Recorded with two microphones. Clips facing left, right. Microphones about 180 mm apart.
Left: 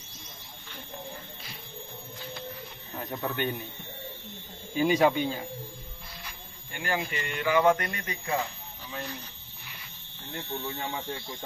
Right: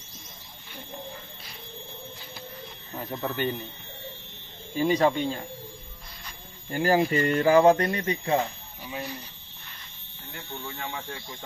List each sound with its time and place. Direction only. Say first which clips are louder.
2.9 s speech: right 1 dB; centre (ahead or behind)
4.7 s speech: even; centre (ahead or behind)
6.7 s speech: right 9 dB; 35° right (ahead or behind)
8.8 s speech: right 3 dB; 10° right (ahead or behind)
10.8 s speech: left 2 dB; 15° left (ahead or behind)